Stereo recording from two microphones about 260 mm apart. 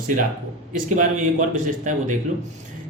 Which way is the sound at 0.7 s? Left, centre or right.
Right.